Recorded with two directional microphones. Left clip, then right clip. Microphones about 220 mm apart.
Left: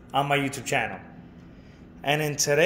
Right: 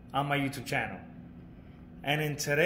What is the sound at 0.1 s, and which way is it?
Speech, 10° left (ahead or behind).